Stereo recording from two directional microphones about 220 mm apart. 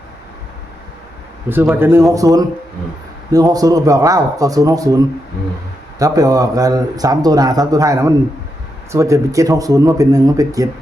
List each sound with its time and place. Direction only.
1.5 s a man's voice: 10° right (ahead or behind)
6.0 s a man's voice: 15° right (ahead or behind)